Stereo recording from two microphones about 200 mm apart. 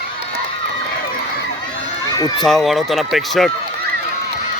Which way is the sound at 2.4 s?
Centre (ahead or behind).